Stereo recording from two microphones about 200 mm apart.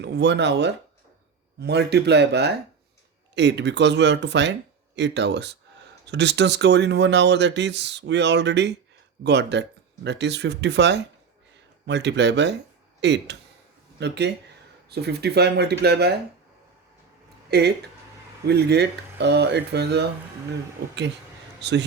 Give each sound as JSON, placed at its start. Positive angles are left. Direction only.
{"t": 0.0, "sound": "speech", "side_deg": -60}
{"t": 17.5, "sound": "speech", "side_deg": -55}
{"t": 21.6, "sound": "a man's voice", "side_deg": -60}